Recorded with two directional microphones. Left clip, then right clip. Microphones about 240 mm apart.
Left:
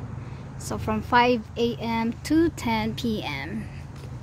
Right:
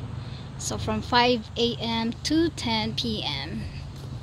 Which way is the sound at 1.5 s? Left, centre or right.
Left.